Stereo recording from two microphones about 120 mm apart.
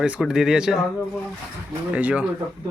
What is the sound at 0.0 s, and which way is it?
Speech, 5° right (ahead or behind).